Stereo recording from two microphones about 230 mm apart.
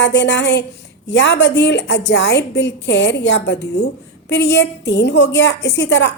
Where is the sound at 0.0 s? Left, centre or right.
Left.